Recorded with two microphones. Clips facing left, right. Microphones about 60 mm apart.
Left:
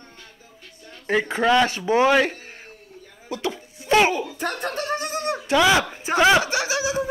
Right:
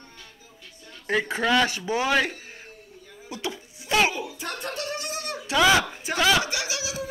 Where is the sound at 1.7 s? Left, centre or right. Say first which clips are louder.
Left 7 dB; left.